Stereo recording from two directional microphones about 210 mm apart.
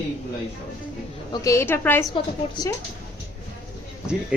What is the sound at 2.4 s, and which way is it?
Speech, 30° left (ahead or behind).